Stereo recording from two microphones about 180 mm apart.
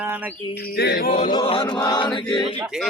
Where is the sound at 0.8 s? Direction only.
60° left (ahead or behind).